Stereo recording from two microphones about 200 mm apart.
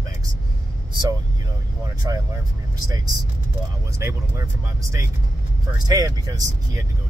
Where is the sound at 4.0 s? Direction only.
15° right (ahead or behind).